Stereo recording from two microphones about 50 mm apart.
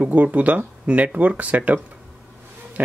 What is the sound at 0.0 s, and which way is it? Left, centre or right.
Speech, right.